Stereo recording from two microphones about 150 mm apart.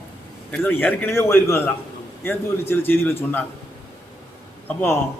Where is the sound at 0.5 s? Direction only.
10° left (ahead or behind).